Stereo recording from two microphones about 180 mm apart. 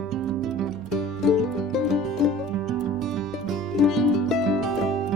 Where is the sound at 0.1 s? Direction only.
Centre (ahead or behind).